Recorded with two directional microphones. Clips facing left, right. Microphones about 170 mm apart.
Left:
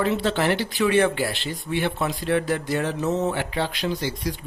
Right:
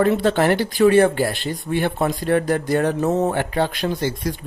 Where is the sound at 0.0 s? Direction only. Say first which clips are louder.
Right 5 dB; 50° right (ahead or behind).